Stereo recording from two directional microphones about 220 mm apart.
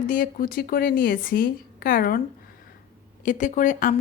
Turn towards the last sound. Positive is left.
turn(degrees=35)  # may be behind; listen again after turning